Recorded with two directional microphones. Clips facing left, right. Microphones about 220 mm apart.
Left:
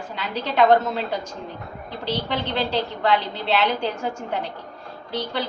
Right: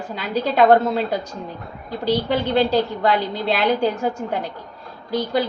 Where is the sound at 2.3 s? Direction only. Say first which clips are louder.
Right 7 dB; 45° right (ahead or behind).